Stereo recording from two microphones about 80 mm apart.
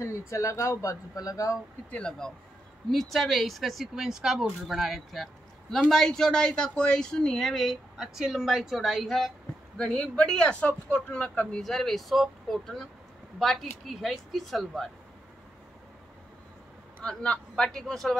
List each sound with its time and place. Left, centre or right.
0.0 s speech: left
1.9 s a woman's voice: centre
9.8 s speech: centre
11.6 s a woman's voice: centre
17.0 s speech: centre